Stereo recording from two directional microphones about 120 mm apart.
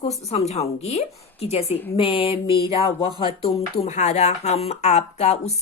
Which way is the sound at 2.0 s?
45° left (ahead or behind).